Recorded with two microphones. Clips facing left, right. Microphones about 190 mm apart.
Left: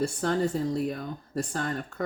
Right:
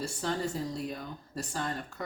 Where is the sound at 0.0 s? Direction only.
55° left (ahead or behind).